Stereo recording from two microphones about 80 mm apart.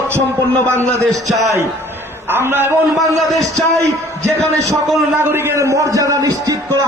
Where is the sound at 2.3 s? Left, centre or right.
Right.